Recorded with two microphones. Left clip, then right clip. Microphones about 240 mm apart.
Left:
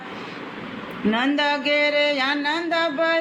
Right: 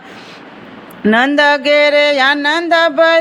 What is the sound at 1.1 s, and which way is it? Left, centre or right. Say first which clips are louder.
Music: right 11 dB; right.